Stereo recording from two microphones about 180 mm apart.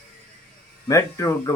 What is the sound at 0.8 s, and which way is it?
Speech, 15° left (ahead or behind).